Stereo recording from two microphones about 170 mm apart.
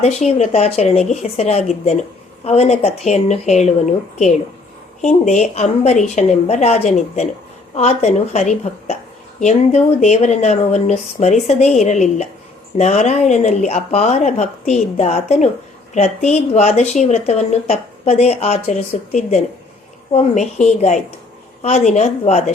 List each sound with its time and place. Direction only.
0.0 s speech: 40° left (ahead or behind)